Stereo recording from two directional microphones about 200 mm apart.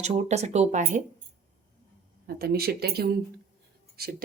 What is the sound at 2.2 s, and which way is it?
A woman's voice, 50° right (ahead or behind).